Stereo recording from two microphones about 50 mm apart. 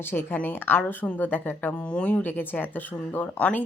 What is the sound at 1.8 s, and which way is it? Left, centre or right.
Speech, left.